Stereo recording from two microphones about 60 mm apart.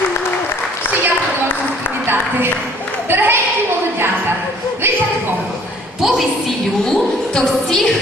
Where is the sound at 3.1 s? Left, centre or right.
Right.